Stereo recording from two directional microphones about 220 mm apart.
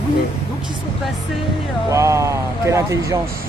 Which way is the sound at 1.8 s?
15° right (ahead or behind).